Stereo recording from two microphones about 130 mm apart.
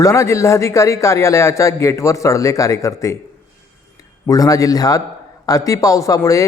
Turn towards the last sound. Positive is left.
turn(degrees=25)  # may be behind; listen again after turning